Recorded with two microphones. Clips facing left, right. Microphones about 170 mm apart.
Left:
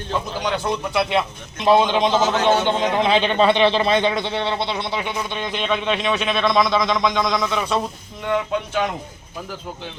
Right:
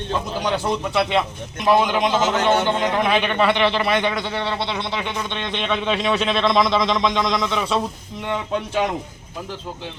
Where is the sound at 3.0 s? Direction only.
25° left (ahead or behind); by 6.4 s centre (ahead or behind).